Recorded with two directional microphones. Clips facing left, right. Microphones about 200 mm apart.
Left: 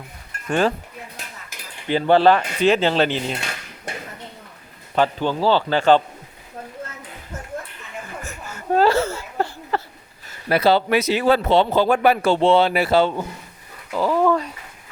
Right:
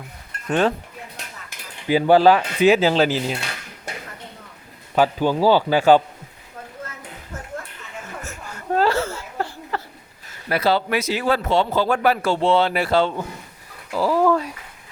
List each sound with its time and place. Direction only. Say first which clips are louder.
0.4 s speech: even; centre (ahead or behind)
1.9 s speech: right 1 dB; 10° right (ahead or behind)
4.9 s speech: right 2 dB; 10° right (ahead or behind)
8.2 s whimper: left 1 dB; centre (ahead or behind)
8.7 s a sound: left 3 dB; 20° left (ahead or behind)
10.5 s speech: left 3 dB; 25° left (ahead or behind); by 13.2 s 10° left (ahead or behind)
13.9 s speech: even; 5° right (ahead or behind)